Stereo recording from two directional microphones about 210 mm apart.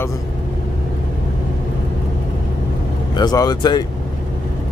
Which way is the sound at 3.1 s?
20° left (ahead or behind).